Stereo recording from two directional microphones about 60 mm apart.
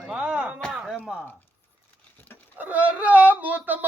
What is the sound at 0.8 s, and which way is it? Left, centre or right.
Chopping, centre.